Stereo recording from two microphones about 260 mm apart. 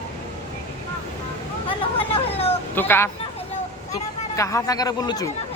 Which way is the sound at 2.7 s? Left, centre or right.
Centre.